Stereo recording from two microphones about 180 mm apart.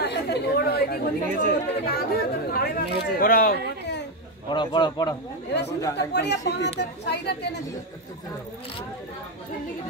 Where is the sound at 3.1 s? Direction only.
55° left (ahead or behind).